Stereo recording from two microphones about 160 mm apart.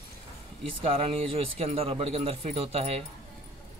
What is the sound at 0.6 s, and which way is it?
A man's voice, 35° right (ahead or behind).